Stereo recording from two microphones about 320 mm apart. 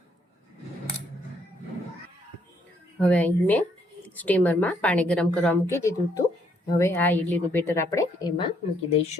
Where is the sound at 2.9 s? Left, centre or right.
Centre.